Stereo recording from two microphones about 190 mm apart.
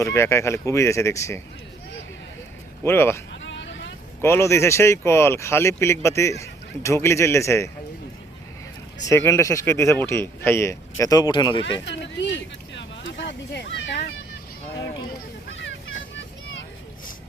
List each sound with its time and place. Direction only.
0.0 s speech: 15° left (ahead or behind)
2.8 s speech: 10° left (ahead or behind)
3.4 s vehicle: 70° left (ahead or behind)
4.2 s speech: 15° left (ahead or behind)
9.0 s speech: 15° left (ahead or behind)
12.0 s a sound: 70° left (ahead or behind)